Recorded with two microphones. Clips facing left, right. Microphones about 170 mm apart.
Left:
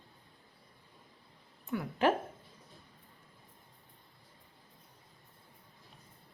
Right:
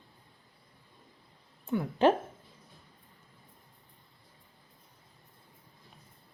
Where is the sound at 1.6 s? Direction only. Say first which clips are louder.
Right 5 dB; 30° right (ahead or behind).